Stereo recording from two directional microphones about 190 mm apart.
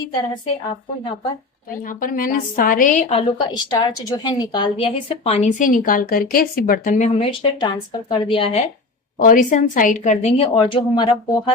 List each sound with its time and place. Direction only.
1.9 s a woman's voice: 45° left (ahead or behind)
3.7 s a woman's voice: 20° left (ahead or behind)
9.1 s a woman's voice: 45° left (ahead or behind); by 11.5 s 25° left (ahead or behind)